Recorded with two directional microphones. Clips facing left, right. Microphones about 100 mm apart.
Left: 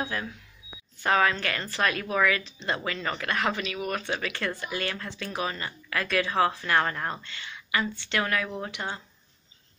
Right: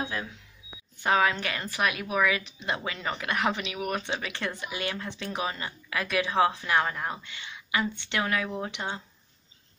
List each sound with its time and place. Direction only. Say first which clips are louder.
1.0 s speech: left 1 dB; 15° right (ahead or behind)